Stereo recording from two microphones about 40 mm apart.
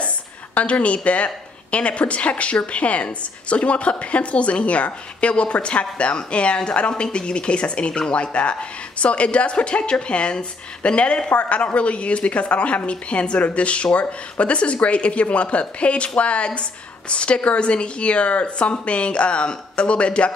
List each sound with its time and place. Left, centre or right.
0.6 s a woman's voice: left